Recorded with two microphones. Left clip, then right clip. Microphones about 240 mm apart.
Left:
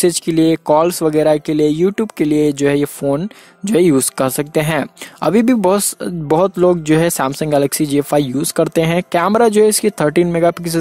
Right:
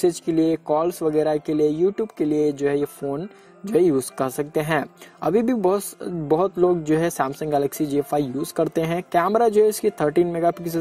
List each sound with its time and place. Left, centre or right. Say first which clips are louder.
0.0 s speech: left 6 dB; left